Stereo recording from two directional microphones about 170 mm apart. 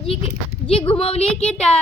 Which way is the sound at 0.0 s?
35° left (ahead or behind).